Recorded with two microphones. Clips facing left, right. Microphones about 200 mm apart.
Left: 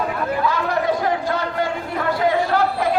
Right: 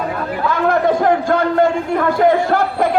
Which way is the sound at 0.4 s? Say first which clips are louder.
Right 8 dB; 50° right (ahead or behind).